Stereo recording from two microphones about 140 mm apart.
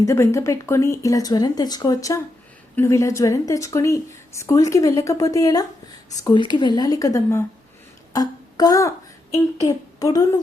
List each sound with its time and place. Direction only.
0.0 s speech: 20° left (ahead or behind)
8.1 s a sound: 25° left (ahead or behind)
9.6 s a woman's voice: 25° left (ahead or behind)